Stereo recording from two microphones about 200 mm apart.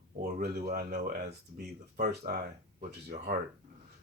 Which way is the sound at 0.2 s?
50° right (ahead or behind).